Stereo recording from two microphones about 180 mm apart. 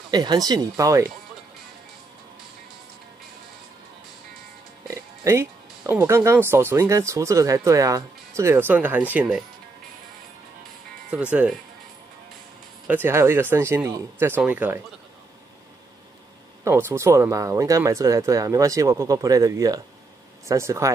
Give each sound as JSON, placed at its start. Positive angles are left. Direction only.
{"t": 0.1, "sound": "speech", "side_deg": -25}
{"t": 4.8, "sound": "speech", "side_deg": -15}
{"t": 11.1, "sound": "speech", "side_deg": -5}
{"t": 12.8, "sound": "speech", "side_deg": -10}
{"t": 16.6, "sound": "speech", "side_deg": -15}